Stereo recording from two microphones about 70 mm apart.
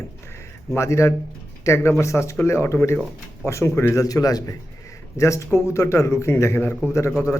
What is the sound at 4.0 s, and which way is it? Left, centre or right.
Speech, left.